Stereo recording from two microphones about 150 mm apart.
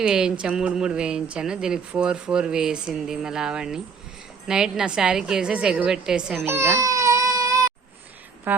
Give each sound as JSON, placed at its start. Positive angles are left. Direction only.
{"t": 0.0, "sound": "speech", "side_deg": -5}
{"t": 6.4, "sound": "baby cry", "side_deg": -15}
{"t": 8.5, "sound": "speech", "side_deg": -10}